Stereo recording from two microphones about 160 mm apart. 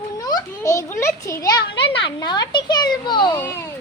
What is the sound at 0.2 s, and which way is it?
A child's voice, 20° left (ahead or behind).